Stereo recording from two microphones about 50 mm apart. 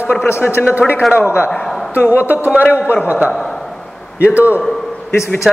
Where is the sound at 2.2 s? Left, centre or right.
Right.